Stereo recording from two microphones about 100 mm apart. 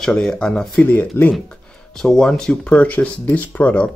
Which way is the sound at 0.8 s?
20° left (ahead or behind).